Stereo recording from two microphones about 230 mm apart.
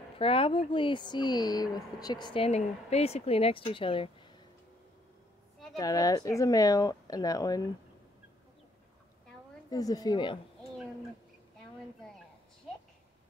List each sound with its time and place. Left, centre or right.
0.2 s speech: left
5.8 s speech: centre
9.7 s speech: centre